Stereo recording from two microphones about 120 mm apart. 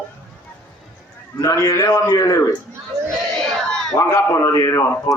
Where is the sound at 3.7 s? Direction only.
5° left (ahead or behind).